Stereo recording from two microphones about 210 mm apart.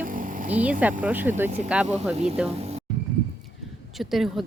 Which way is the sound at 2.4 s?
30° right (ahead or behind).